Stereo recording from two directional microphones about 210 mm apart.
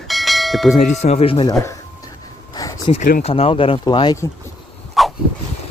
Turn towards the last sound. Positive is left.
turn(degrees=0)  # may be behind; listen again after turning